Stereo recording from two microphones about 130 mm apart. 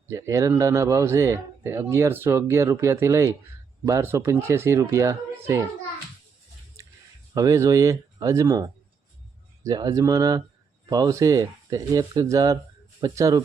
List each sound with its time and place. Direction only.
0.1 s speech: 25° right (ahead or behind)
7.3 s speech: 25° right (ahead or behind)
9.6 s speech: 25° right (ahead or behind)